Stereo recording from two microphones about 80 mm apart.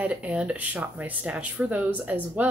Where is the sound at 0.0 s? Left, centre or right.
Centre.